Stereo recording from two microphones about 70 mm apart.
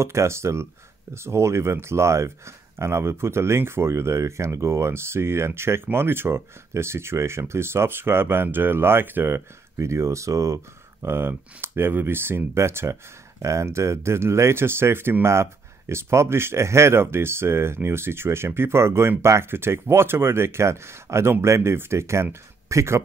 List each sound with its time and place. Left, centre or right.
0.0 s speech: right